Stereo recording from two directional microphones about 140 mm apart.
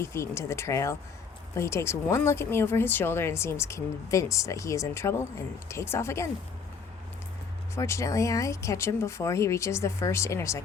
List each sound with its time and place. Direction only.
0.0 s speech: 20° left (ahead or behind)
7.8 s speech: 20° left (ahead or behind)